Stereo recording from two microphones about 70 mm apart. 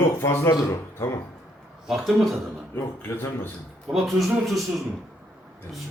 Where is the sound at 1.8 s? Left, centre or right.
Centre.